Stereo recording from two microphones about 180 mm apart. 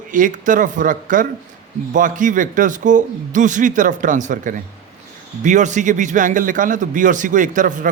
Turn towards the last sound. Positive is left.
turn(degrees=-45)  # may be behind; listen again after turning